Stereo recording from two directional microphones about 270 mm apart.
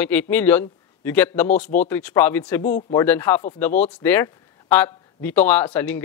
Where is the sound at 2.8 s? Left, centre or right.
Centre.